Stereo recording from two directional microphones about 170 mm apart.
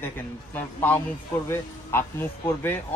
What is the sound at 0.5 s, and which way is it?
Speech, 10° left (ahead or behind).